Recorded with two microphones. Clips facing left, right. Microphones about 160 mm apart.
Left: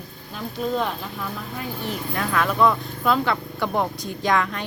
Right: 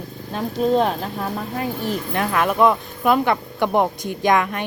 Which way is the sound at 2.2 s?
20° right (ahead or behind).